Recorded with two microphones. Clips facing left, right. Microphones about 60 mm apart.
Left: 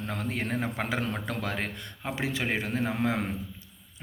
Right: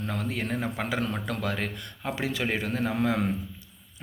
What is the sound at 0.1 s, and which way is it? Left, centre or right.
A man's voice, left.